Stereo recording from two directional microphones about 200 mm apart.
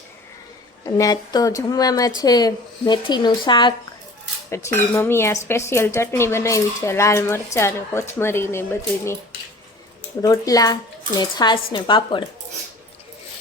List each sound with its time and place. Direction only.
0.9 s a woman's voice: 15° left (ahead or behind)
10.2 s a woman's voice: 15° left (ahead or behind)